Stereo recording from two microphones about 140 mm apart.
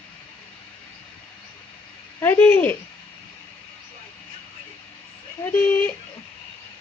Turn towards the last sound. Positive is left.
turn(degrees=15)  # may be behind; listen again after turning